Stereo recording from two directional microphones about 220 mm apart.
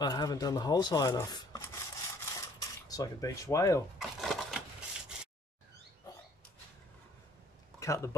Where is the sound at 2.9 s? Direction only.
15° left (ahead or behind).